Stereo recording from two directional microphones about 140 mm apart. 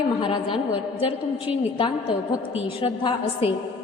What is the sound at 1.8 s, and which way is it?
A woman's voice, 35° left (ahead or behind).